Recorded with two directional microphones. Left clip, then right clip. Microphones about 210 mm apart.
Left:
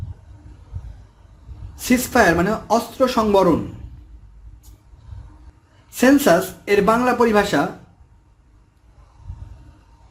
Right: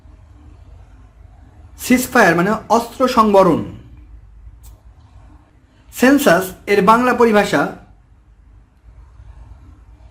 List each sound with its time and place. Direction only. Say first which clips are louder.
1.7 s speech: right 3 dB; 5° right (ahead or behind)
6.0 s speech: right 2 dB; 5° right (ahead or behind)